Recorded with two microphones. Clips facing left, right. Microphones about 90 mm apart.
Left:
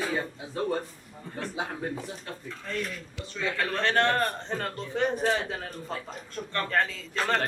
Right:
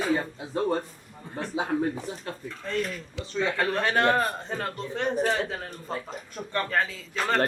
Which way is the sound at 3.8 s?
10° right (ahead or behind).